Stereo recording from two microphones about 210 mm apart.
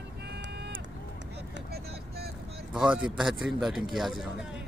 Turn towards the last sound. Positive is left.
turn(degrees=0)  # may be behind; listen again after turning